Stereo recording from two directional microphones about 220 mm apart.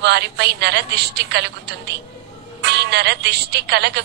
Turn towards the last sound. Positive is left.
turn(degrees=-50)  # may be behind; listen again after turning